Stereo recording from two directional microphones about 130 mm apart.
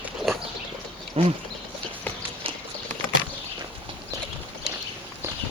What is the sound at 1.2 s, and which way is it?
Speech, 45° right (ahead or behind).